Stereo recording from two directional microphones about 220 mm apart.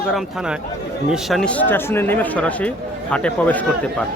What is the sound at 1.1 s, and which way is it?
Speech, centre (ahead or behind).